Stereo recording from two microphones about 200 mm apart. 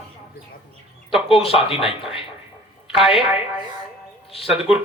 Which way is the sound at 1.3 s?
30° left (ahead or behind).